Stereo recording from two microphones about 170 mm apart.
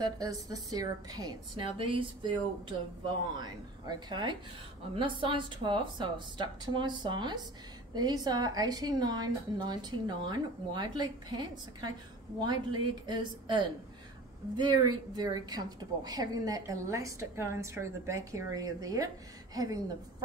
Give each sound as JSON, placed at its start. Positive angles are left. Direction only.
{"t": 0.0, "sound": "a woman's voice", "side_deg": -20}